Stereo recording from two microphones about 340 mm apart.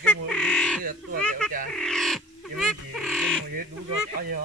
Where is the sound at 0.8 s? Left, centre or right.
Right.